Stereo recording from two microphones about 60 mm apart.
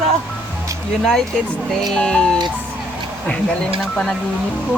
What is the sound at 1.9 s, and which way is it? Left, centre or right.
Speech, centre.